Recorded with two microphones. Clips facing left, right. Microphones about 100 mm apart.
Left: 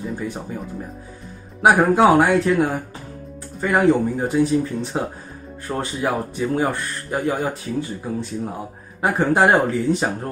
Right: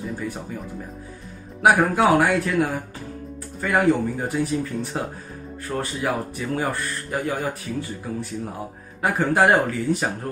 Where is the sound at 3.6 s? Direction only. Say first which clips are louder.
Left 3 dB; 20° left (ahead or behind).